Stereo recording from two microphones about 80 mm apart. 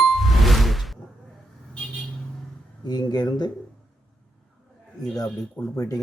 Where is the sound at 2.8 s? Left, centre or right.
Left.